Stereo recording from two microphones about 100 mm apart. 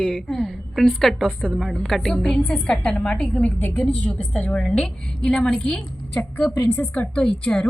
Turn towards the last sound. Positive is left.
turn(degrees=5)  # may be behind; listen again after turning